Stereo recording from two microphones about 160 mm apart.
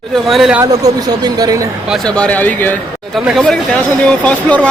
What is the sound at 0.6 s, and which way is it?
Speech, 25° right (ahead or behind).